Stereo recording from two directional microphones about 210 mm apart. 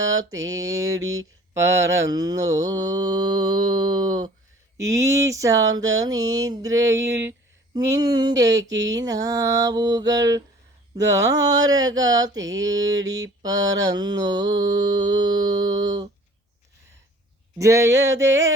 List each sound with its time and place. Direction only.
0.0 s mantra: 15° right (ahead or behind)
17.6 s mantra: 15° right (ahead or behind)